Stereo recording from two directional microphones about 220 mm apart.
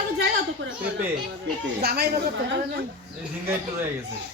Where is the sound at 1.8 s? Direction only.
45° right (ahead or behind).